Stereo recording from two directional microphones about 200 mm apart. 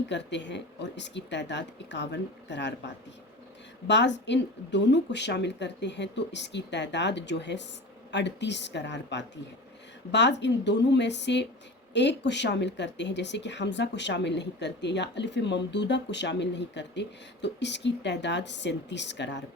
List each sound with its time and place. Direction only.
0.1 s speech: 60° left (ahead or behind)